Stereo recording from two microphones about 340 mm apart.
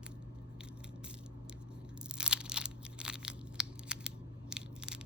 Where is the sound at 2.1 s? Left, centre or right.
Centre.